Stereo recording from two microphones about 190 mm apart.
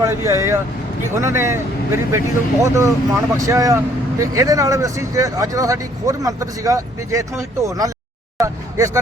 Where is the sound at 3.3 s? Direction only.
15° right (ahead or behind).